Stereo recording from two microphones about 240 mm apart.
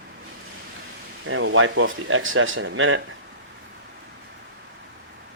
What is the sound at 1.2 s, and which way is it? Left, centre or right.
Speech, right.